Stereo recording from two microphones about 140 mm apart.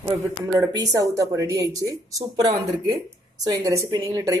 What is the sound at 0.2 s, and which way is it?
Speech, 20° right (ahead or behind).